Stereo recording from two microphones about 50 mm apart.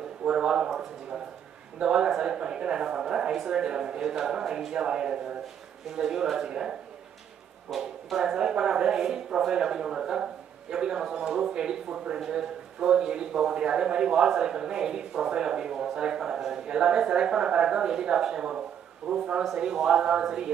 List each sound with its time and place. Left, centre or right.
0.2 s a sound: centre
1.8 s a man's voice: centre
7.7 s speech: centre
8.2 s a man's voice: centre